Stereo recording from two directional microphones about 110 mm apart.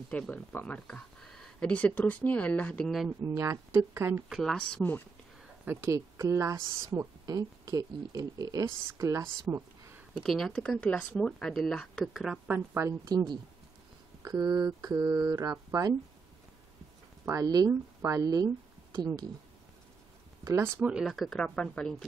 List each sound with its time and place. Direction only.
0.1 s speech: 10° left (ahead or behind)
3.3 s speech: 25° right (ahead or behind)
4.3 s speech: 5° left (ahead or behind)
5.7 s speech: 25° right (ahead or behind)
10.2 s speech: 5° left (ahead or behind)
12.1 s speech: 5° right (ahead or behind)
12.4 s speech: 20° right (ahead or behind)
13.0 s speech: 35° right (ahead or behind)
17.2 s speech: 30° right (ahead or behind)
20.4 s speech: 25° right (ahead or behind)
20.8 s speech: 5° right (ahead or behind)